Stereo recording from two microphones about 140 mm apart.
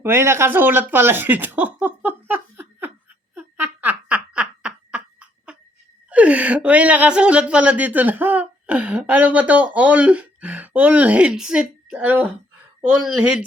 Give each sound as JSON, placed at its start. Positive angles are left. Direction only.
{"t": 0.0, "sound": "speech", "side_deg": -20}
{"t": 3.3, "sound": "laughter", "side_deg": -10}
{"t": 6.1, "sound": "speech", "side_deg": -10}